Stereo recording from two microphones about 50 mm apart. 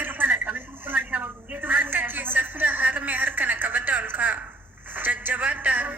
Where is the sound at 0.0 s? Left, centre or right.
Right.